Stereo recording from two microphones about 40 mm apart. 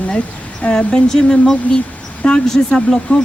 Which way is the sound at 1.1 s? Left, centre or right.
Centre.